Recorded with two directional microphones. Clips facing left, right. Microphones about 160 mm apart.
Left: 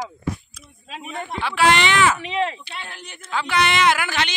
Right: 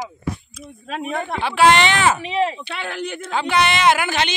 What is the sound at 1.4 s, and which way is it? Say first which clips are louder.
Speech: right 3 dB; 25° right (ahead or behind).